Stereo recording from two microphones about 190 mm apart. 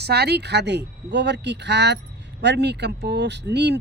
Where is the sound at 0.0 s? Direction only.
60° right (ahead or behind).